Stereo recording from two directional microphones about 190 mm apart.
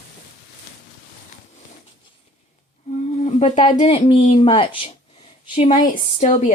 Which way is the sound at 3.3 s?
30° left (ahead or behind).